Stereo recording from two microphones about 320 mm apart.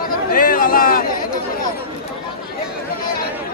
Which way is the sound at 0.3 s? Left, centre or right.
Left.